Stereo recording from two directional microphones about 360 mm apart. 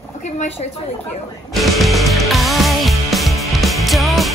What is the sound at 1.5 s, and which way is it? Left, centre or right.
Music, centre.